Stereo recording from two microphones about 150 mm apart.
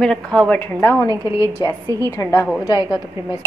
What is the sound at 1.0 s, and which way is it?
Speech, 20° right (ahead or behind).